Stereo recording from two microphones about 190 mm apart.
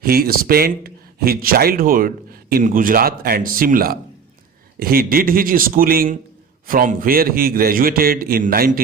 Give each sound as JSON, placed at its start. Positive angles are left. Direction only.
{"t": 0.0, "sound": "speech", "side_deg": -50}